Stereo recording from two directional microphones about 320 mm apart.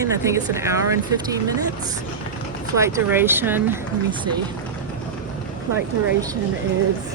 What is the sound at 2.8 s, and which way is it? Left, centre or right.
Speech, centre.